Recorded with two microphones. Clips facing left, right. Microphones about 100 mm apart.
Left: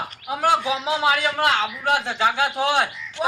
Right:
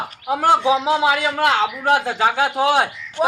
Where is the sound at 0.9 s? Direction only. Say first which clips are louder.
Right 3 dB; 30° right (ahead or behind).